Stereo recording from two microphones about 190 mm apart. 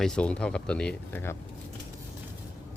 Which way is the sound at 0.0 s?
5° left (ahead or behind).